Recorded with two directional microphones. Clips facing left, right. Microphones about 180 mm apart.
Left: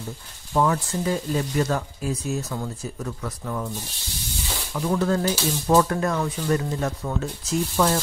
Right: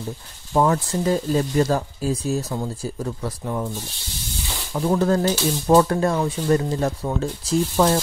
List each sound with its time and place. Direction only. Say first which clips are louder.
0.5 s speech: right 3 dB; 35° right (ahead or behind)
4.7 s speech: right 4 dB; 35° right (ahead or behind)